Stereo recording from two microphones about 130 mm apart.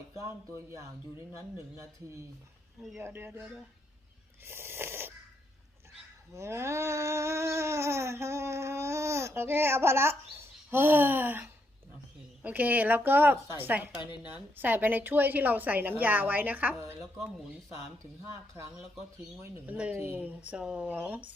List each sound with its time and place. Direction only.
3.0 s a woman's voice: 15° right (ahead or behind)
4.4 s snoring: 20° right (ahead or behind)
6.3 s a sound: 20° right (ahead or behind)
12.4 s a woman's voice: 10° right (ahead or behind)
19.4 s a woman's voice: 10° right (ahead or behind)